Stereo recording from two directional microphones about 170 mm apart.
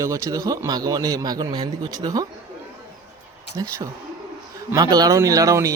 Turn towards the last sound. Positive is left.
turn(degrees=-20)  # may be behind; listen again after turning